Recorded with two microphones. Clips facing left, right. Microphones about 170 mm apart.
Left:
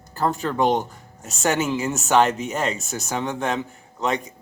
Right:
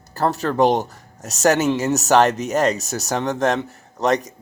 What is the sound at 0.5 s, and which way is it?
Speech, 40° right (ahead or behind).